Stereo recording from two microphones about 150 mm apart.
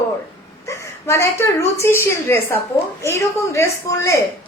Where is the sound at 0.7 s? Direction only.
20° left (ahead or behind).